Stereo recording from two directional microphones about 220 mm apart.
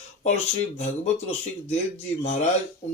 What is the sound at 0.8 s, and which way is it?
Speech, 30° left (ahead or behind).